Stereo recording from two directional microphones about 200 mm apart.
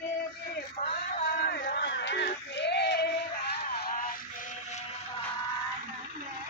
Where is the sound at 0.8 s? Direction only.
35° left (ahead or behind).